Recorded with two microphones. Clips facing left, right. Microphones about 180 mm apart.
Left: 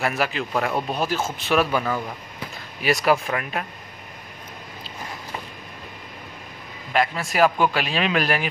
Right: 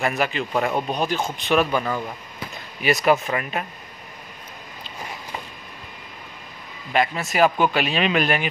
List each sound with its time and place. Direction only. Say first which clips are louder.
0.0 s speech: right 1 dB; centre (ahead or behind)
6.9 s speech: right 1 dB; centre (ahead or behind)